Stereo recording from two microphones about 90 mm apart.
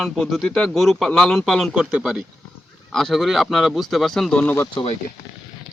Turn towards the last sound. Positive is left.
turn(degrees=25)  # may be behind; listen again after turning